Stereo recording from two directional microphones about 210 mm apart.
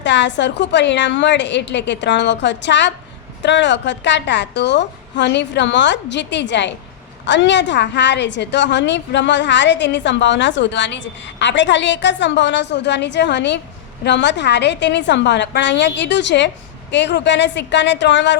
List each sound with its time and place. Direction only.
0.0 s a woman's voice: 60° left (ahead or behind)